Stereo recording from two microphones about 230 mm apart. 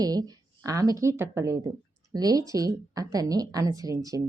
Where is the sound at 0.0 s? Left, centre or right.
Centre.